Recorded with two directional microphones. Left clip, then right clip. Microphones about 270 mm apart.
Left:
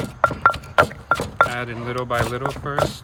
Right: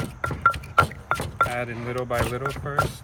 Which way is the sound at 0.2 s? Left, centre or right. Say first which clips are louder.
Left 5 dB; centre.